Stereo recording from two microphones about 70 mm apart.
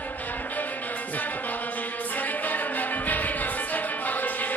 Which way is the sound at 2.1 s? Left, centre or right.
Left.